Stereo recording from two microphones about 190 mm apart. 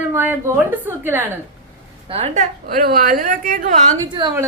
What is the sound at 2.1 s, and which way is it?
A woman's voice, 35° right (ahead or behind).